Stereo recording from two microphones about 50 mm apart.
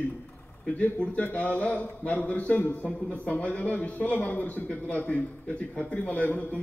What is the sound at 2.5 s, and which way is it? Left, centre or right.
Speech, left.